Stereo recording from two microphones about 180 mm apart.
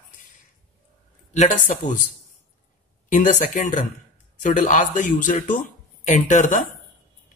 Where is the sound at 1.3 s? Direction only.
40° left (ahead or behind).